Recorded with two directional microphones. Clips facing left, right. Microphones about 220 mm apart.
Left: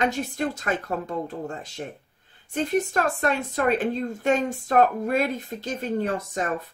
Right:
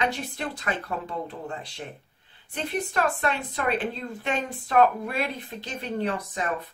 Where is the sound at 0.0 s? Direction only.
45° left (ahead or behind).